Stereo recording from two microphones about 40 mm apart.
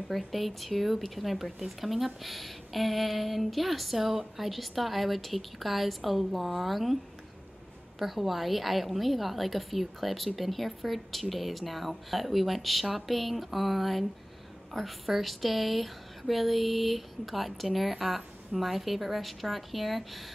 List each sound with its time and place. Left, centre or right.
0.1 s a woman's voice: centre
8.0 s a woman's voice: centre